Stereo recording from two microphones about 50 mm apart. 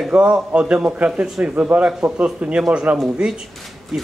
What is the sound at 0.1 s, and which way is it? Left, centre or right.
A man's voice, right.